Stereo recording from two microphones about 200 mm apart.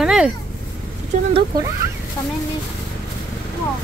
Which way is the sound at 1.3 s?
25° right (ahead or behind).